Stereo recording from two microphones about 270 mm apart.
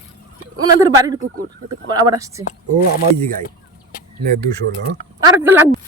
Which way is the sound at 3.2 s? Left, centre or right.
Right.